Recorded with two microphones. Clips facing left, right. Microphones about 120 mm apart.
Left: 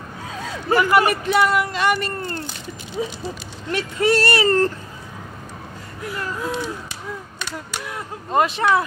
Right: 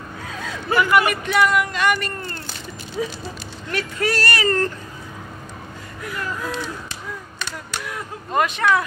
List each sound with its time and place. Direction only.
0.4 s speech: 35° left (ahead or behind)
6.0 s speech: 30° left (ahead or behind)
7.8 s speech: 25° left (ahead or behind)